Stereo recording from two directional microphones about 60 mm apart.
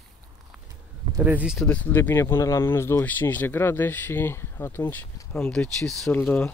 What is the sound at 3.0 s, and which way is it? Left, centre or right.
Speech, left.